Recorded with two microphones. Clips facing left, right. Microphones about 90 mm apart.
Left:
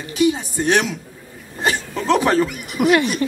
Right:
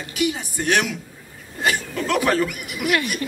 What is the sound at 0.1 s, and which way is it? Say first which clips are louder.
A man's voice: left 6 dB; 25° left (ahead or behind).